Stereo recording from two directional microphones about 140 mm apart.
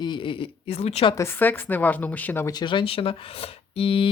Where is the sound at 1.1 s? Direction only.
15° left (ahead or behind).